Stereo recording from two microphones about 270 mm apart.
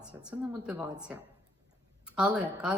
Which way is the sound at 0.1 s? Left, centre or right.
Centre.